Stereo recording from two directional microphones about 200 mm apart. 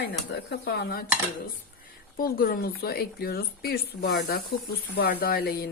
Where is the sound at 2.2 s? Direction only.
45° left (ahead or behind).